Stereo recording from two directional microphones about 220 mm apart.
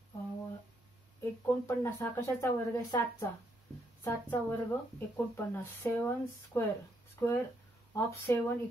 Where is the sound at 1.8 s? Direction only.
15° left (ahead or behind).